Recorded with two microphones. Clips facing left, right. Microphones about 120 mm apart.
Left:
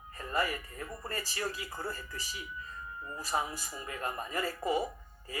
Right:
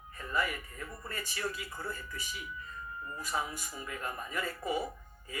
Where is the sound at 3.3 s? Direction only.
30° left (ahead or behind).